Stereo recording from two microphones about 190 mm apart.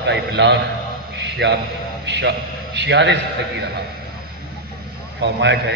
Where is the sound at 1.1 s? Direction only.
65° right (ahead or behind).